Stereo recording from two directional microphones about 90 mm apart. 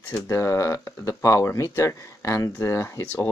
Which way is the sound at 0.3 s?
35° left (ahead or behind).